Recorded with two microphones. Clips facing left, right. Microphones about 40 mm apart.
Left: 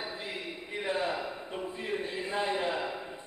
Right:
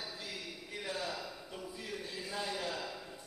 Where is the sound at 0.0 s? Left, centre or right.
Left.